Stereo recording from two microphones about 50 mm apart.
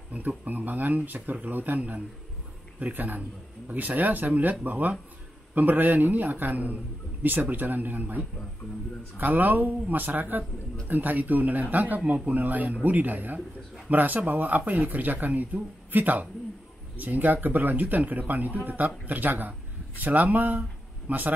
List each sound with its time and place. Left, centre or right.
0.1 s speech: right